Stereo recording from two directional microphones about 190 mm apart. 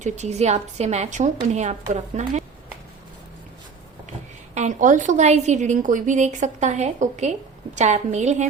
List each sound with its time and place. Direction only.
0.0 s a woman's voice: 35° right (ahead or behind)
4.5 s a woman's voice: 40° right (ahead or behind)